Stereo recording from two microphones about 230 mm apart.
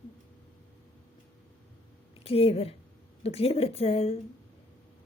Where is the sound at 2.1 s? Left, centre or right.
Left.